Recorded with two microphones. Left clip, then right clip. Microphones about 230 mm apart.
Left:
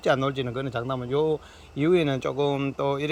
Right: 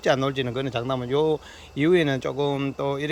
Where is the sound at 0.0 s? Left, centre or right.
Centre.